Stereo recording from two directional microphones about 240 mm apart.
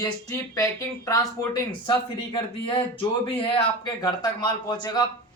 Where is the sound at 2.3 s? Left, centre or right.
Left.